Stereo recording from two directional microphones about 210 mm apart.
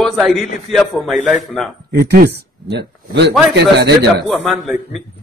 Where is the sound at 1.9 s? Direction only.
50° right (ahead or behind).